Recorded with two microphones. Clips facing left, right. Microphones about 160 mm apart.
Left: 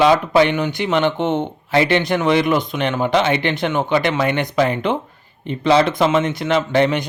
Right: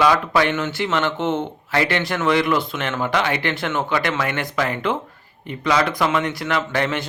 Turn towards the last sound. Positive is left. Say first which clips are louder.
# left 6 dB
turn(degrees=20)  # may be behind; listen again after turning